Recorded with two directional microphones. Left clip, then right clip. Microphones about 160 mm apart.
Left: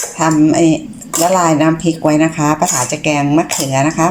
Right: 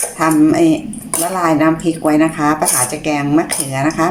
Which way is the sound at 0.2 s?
5° left (ahead or behind).